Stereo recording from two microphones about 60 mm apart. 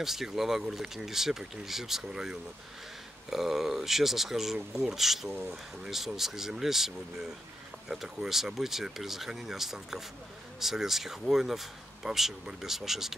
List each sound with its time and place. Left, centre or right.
0.0 s speech: centre
7.9 s speech: centre